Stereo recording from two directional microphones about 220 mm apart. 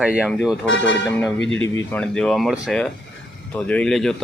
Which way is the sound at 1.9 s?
5° left (ahead or behind).